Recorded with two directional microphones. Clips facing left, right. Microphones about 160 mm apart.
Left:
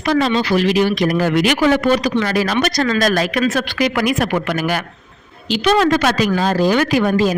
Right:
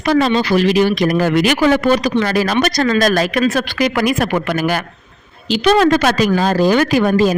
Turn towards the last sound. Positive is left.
turn(degrees=-40)  # may be behind; listen again after turning